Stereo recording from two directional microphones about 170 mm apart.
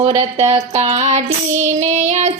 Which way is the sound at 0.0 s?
40° right (ahead or behind).